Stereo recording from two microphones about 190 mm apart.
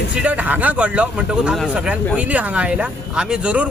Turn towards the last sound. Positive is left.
turn(degrees=-5)  # may be behind; listen again after turning